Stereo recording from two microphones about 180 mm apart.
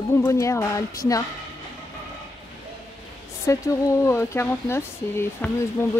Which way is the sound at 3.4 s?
15° left (ahead or behind).